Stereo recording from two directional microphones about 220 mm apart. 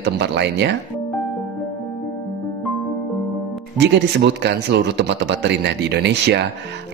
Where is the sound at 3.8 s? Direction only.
50° right (ahead or behind).